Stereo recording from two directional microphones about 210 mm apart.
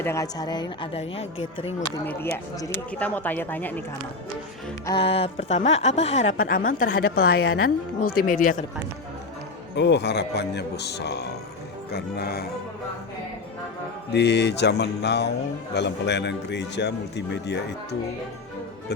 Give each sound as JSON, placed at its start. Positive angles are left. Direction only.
{"t": 0.0, "sound": "a woman's voice", "side_deg": 15}
{"t": 2.0, "sound": "speech", "side_deg": 15}
{"t": 4.9, "sound": "a woman's voice", "side_deg": 25}
{"t": 9.7, "sound": "speech", "side_deg": 55}
{"t": 14.1, "sound": "a man's voice", "side_deg": 55}